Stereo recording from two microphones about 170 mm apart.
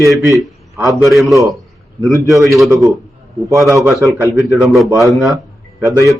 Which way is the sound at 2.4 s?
Centre (ahead or behind).